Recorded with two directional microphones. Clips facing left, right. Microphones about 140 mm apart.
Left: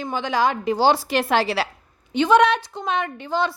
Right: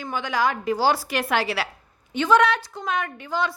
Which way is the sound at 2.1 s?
20° left (ahead or behind).